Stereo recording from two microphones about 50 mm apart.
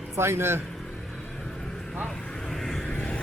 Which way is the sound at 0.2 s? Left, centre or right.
Right.